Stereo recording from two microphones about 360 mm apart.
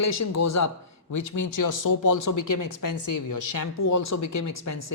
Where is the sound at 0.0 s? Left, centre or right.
Left.